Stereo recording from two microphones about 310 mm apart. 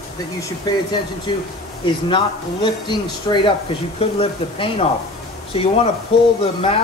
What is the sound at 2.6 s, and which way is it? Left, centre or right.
Speech, centre.